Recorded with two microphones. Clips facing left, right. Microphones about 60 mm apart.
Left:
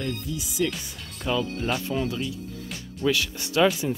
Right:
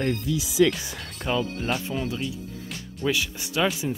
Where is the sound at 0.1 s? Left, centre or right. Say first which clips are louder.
Right 5 dB; right.